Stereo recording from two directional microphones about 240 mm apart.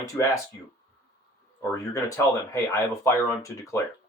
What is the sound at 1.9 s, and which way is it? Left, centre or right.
Speech, centre.